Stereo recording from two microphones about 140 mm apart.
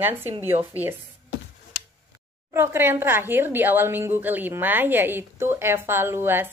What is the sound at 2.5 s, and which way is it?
A woman's voice, 15° right (ahead or behind).